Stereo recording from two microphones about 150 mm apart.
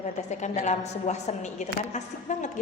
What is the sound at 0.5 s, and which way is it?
Speech, 50° left (ahead or behind).